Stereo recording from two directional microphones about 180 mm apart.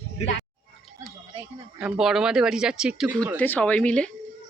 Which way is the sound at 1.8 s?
5° right (ahead or behind).